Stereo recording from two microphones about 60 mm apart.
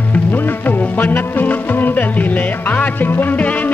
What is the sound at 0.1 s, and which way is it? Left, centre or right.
Music, left.